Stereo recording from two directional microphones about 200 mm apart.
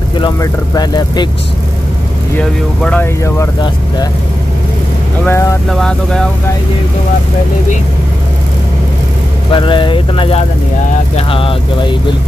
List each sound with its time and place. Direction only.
0.2 s speech: 20° left (ahead or behind)
2.3 s speech: 5° left (ahead or behind)
5.2 s speech: 10° left (ahead or behind)
5.7 s speech: centre (ahead or behind)
9.5 s speech: 25° left (ahead or behind)